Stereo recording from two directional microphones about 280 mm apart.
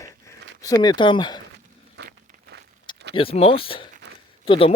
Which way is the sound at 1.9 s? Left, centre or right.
Right.